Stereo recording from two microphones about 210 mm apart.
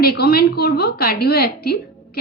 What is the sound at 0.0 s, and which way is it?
A woman's voice, 45° left (ahead or behind).